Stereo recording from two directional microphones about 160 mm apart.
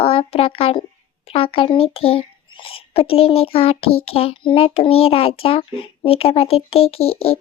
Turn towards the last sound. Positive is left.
turn(degrees=40)  # may be behind; listen again after turning